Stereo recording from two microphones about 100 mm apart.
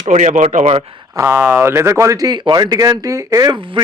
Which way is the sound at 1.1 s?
25° right (ahead or behind).